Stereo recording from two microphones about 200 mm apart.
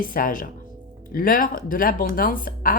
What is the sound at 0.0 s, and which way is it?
A woman's voice, 45° left (ahead or behind).